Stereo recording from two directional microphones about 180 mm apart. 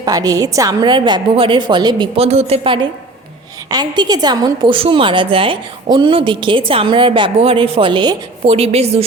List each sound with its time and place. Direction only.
0.0 s a woman's voice: 20° right (ahead or behind); by 9.0 s 35° right (ahead or behind)